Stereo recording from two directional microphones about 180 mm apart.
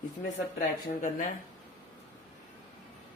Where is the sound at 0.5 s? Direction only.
45° left (ahead or behind).